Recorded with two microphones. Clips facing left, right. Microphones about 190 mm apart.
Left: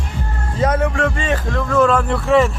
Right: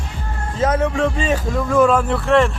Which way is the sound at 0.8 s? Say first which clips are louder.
Right 1 dB; centre (ahead or behind).